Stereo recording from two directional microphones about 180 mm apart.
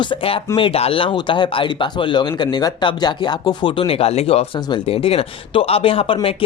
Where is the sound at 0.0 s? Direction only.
30° left (ahead or behind).